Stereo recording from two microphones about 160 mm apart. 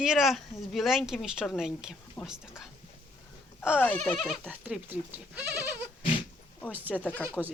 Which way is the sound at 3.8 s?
10° left (ahead or behind).